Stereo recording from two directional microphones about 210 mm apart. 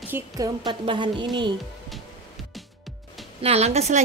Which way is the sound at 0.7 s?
20° right (ahead or behind).